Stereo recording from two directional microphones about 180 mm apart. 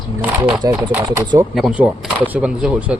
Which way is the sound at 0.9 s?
10° right (ahead or behind).